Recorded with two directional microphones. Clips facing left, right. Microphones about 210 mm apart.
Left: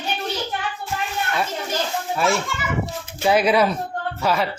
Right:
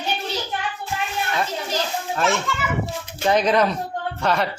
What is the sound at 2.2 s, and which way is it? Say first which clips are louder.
A man's voice: even; 10° left (ahead or behind).